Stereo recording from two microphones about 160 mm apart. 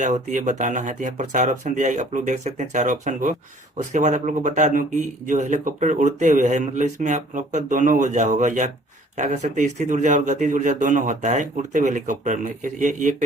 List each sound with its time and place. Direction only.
0.0 s a man's voice: 50° right (ahead or behind)